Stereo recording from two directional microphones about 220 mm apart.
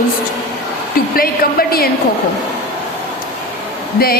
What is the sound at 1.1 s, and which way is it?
Speech, 45° left (ahead or behind).